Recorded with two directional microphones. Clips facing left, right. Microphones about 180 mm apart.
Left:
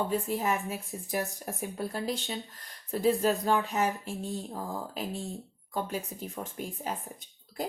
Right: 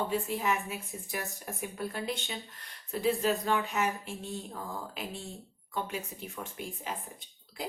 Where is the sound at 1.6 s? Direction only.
35° left (ahead or behind).